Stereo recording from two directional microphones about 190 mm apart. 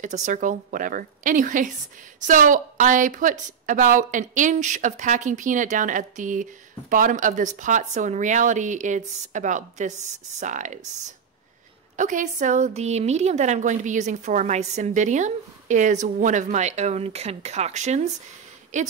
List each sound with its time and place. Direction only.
0.0 s a woman's voice: 40° right (ahead or behind)
12.0 s a woman's voice: 40° right (ahead or behind)